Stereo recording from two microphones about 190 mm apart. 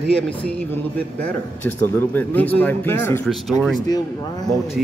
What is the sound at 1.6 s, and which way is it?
Speech, 10° left (ahead or behind).